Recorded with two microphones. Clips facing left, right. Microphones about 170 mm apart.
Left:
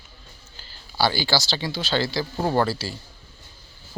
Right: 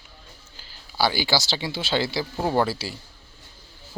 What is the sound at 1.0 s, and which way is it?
Speech, 15° right (ahead or behind).